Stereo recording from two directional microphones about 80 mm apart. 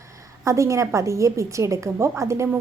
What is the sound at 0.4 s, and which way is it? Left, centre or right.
A woman's voice, right.